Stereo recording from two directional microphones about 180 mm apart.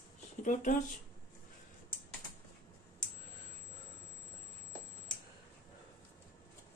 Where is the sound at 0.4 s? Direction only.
45° left (ahead or behind).